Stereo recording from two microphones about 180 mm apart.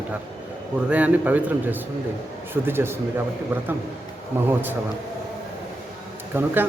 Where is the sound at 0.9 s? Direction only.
10° right (ahead or behind).